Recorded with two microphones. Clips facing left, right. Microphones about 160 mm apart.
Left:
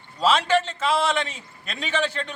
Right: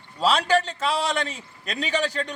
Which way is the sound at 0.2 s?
40° right (ahead or behind).